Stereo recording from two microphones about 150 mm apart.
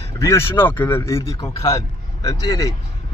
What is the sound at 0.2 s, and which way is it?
A man's voice, 20° left (ahead or behind).